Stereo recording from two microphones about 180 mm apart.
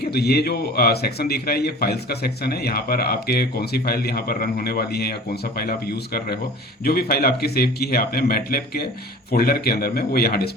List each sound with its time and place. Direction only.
0.1 s a man's voice: 60° left (ahead or behind)